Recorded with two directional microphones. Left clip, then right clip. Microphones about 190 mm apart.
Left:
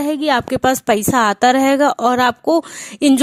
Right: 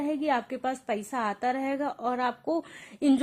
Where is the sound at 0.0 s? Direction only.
35° left (ahead or behind).